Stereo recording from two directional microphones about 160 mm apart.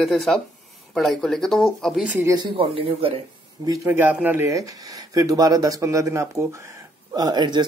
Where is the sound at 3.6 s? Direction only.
15° right (ahead or behind).